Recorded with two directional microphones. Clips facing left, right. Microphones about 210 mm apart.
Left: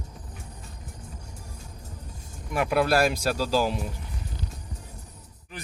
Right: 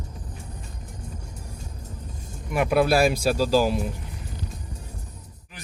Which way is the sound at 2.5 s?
10° right (ahead or behind).